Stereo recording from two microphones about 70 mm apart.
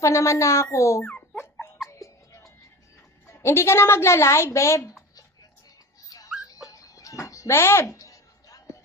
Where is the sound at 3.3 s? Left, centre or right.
Left.